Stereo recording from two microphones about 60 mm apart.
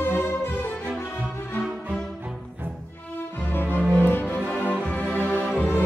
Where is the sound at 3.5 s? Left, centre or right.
Left.